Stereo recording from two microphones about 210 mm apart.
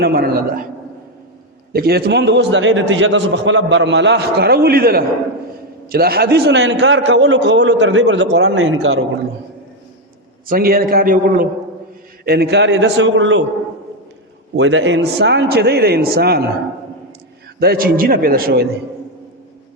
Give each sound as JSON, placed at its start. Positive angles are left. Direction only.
{"t": 0.0, "sound": "a man's voice", "side_deg": -45}
{"t": 1.7, "sound": "a man's voice", "side_deg": -45}
{"t": 10.4, "sound": "a man's voice", "side_deg": -45}
{"t": 14.5, "sound": "a man's voice", "side_deg": -60}
{"t": 17.6, "sound": "a man's voice", "side_deg": -45}